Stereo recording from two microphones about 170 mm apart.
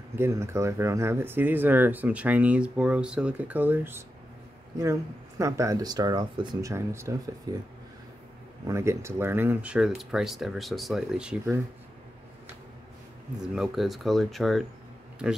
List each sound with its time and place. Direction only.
0.1 s speech: 15° right (ahead or behind)
5.4 s speech: 20° right (ahead or behind)
8.6 s speech: 15° right (ahead or behind)
13.6 s speech: centre (ahead or behind)